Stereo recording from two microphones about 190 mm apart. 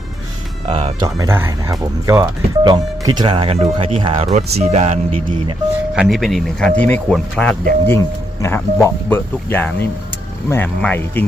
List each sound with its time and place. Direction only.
0.6 s speech: 30° right (ahead or behind)
5.9 s speech: centre (ahead or behind)